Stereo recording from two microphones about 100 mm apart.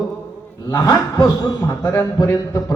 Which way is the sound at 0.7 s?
40° left (ahead or behind).